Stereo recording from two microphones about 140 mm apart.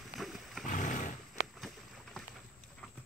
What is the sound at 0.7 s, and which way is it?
Roar, 65° left (ahead or behind).